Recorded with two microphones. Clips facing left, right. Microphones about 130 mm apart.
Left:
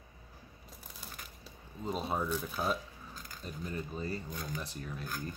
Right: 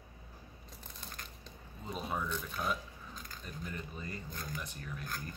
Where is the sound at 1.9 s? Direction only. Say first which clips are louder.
Left 4 dB; 30° left (ahead or behind).